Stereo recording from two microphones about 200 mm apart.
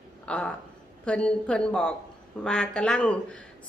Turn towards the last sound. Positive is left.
turn(degrees=5)  # may be behind; listen again after turning